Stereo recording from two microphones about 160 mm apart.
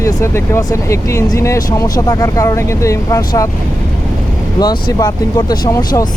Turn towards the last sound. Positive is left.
turn(degrees=25)  # may be behind; listen again after turning